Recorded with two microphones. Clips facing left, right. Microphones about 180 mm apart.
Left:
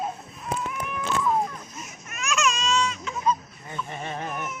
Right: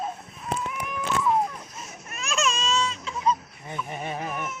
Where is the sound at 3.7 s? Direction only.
10° right (ahead or behind).